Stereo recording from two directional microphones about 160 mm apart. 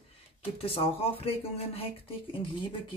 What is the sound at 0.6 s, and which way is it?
Speech, 35° left (ahead or behind).